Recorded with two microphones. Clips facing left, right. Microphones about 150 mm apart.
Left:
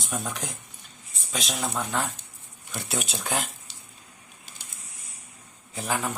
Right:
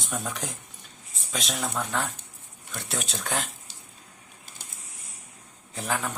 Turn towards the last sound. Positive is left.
turn(degrees=5)  # may be behind; listen again after turning